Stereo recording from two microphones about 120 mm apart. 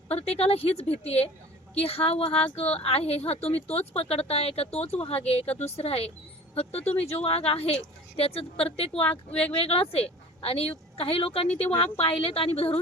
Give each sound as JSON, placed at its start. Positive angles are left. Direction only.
{"t": 0.1, "sound": "speech", "side_deg": 60}
{"t": 8.9, "sound": "speech", "side_deg": 10}
{"t": 9.6, "sound": "a woman's voice", "side_deg": 55}